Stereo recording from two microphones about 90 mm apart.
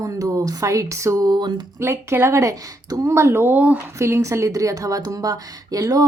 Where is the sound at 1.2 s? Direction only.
50° right (ahead or behind).